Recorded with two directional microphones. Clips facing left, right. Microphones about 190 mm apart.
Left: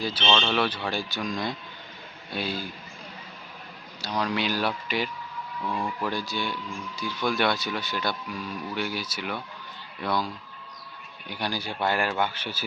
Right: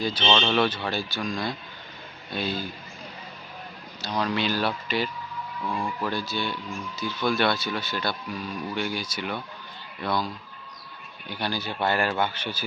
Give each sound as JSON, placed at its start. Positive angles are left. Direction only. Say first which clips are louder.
{"t": 0.0, "sound": "speech", "louder": "right 2 dB", "side_deg": 10}
{"t": 0.3, "sound": "speech", "louder": "right 1 dB", "side_deg": -10}
{"t": 0.5, "sound": "speech", "louder": "right 2 dB", "side_deg": 5}
{"t": 4.0, "sound": "speech", "louder": "right 1 dB", "side_deg": 10}